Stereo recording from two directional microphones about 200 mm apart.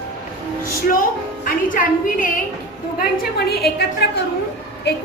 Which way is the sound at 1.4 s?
40° left (ahead or behind).